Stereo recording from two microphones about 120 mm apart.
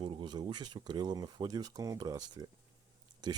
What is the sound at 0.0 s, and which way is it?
Speech, 40° right (ahead or behind).